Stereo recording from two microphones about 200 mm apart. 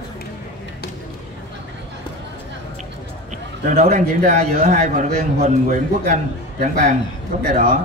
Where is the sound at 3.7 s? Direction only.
40° right (ahead or behind).